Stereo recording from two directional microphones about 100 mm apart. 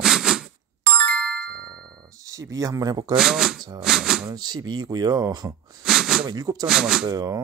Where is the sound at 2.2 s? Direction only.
35° right (ahead or behind).